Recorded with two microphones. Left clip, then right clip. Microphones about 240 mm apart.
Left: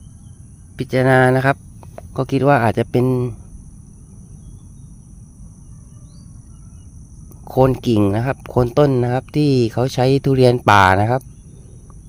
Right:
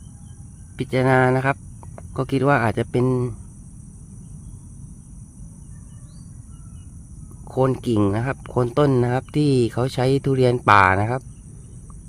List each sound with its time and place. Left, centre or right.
0.8 s speech: centre
7.4 s speech: centre